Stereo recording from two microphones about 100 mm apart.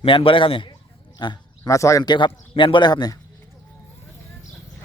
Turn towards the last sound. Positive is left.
turn(degrees=45)  # may be behind; listen again after turning